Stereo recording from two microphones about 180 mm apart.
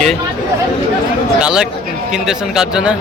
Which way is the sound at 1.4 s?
5° right (ahead or behind).